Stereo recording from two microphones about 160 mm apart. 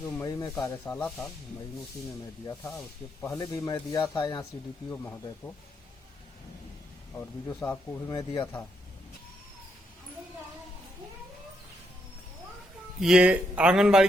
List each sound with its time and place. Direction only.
0.0 s speech: 20° left (ahead or behind)
2.7 s speech: 20° left (ahead or behind)
7.2 s speech: 10° left (ahead or behind)
13.0 s a man's voice: 5° right (ahead or behind)